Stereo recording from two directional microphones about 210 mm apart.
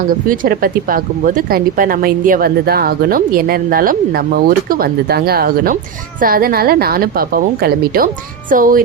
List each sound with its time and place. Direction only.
0.1 s speech: 45° right (ahead or behind)